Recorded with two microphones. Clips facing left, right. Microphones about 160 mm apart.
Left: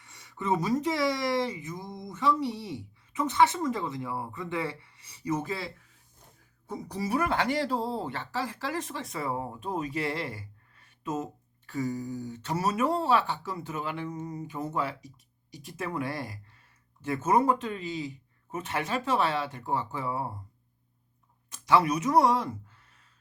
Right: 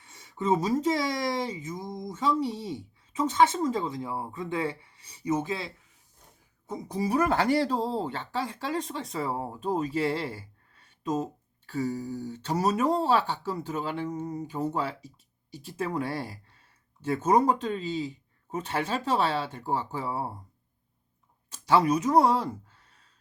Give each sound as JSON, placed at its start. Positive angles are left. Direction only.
{"t": 0.0, "sound": "a sound", "side_deg": -25}
{"t": 1.5, "sound": "speech", "side_deg": -20}
{"t": 7.1, "sound": "speech", "side_deg": -40}
{"t": 14.1, "sound": "speech", "side_deg": -20}
{"t": 14.4, "sound": "speech", "side_deg": -30}
{"t": 21.7, "sound": "speech", "side_deg": -30}